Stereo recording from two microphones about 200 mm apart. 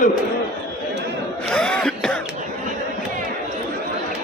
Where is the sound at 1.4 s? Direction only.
5° left (ahead or behind).